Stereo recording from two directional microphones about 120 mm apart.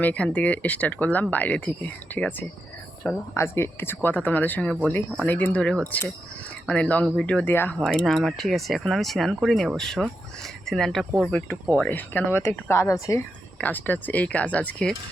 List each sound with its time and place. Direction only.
0.0 s speech: 10° left (ahead or behind)
8.0 s speech: centre (ahead or behind)